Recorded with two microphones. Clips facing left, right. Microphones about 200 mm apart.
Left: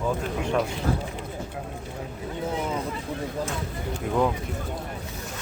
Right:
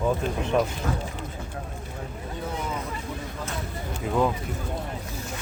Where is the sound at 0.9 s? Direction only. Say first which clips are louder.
Left 3 dB; 35° left (ahead or behind).